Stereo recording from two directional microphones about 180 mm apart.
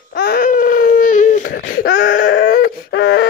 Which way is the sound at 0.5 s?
50° left (ahead or behind).